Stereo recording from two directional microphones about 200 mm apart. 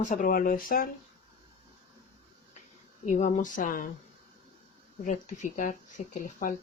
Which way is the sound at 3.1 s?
35° left (ahead or behind).